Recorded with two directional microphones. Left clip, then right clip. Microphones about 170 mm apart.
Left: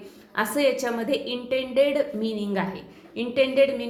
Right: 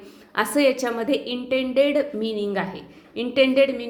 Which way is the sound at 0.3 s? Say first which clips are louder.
Right 3 dB; 30° right (ahead or behind).